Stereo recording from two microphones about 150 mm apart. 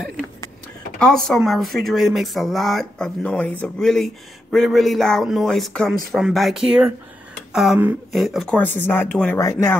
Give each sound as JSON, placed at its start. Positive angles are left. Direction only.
{"t": 0.9, "sound": "a man's voice", "side_deg": 5}
{"t": 8.5, "sound": "speech", "side_deg": 10}